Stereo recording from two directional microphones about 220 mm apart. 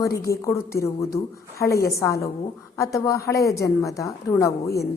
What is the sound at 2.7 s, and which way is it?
A woman's voice, 15° left (ahead or behind).